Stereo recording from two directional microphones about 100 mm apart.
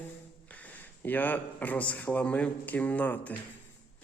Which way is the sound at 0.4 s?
15° left (ahead or behind).